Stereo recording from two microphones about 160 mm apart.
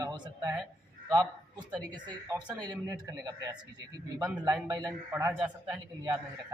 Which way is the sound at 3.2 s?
25° right (ahead or behind).